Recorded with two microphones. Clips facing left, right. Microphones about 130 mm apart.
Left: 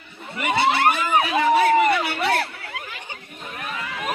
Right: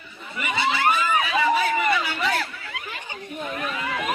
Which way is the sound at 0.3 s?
60° left (ahead or behind).